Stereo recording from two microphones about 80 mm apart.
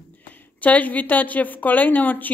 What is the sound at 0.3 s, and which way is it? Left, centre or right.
A woman's voice, centre.